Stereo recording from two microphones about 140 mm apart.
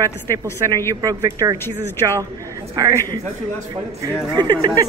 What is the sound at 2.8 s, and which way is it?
Speech, 30° right (ahead or behind).